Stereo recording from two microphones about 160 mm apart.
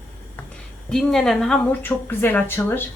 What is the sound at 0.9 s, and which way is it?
A woman's voice, 5° left (ahead or behind).